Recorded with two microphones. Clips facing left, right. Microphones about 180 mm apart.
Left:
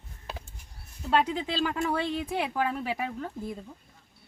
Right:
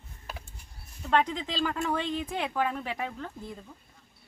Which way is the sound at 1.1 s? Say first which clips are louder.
Left 1 dB; 5° left (ahead or behind).